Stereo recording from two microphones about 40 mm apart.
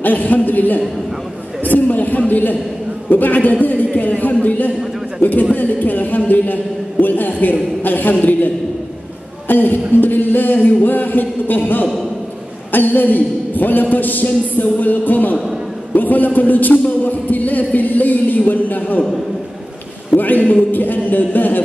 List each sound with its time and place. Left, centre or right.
0.0 s speech: left
1.6 s a sound: left
3.1 s a man's voice: left
9.5 s speech: left
20.2 s speech: left